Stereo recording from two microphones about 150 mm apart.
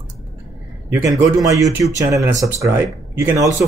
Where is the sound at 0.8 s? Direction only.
20° right (ahead or behind).